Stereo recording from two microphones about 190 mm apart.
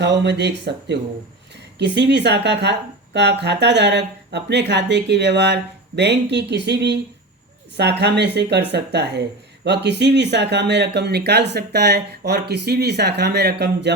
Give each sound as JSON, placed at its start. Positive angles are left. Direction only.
{"t": 0.0, "sound": "speech", "side_deg": -65}